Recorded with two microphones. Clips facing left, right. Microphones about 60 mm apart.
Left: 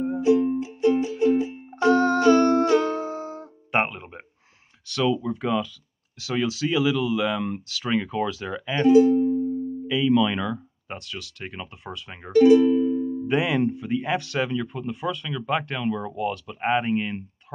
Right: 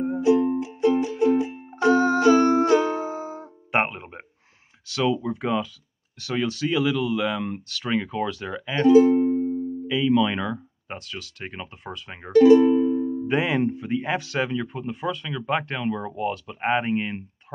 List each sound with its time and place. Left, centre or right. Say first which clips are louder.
0.2 s music: even; right
1.8 s music: even; centre
4.9 s speech: even; centre
6.1 s speech: even; centre
8.8 s speech: right 1 dB; right
9.8 s speech: even; centre
12.4 s music: right 1 dB; right
13.3 s speech: left 1 dB; centre